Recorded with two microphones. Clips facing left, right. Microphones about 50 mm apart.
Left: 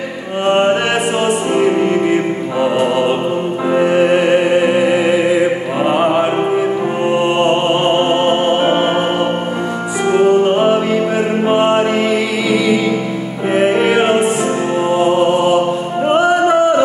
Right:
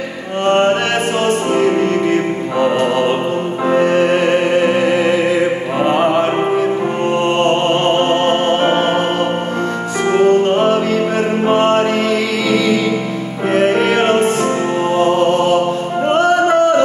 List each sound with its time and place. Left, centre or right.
0.5 s mantra: centre
1.2 s music: centre
7.3 s music: centre
10.1 s music: centre
13.5 s music: centre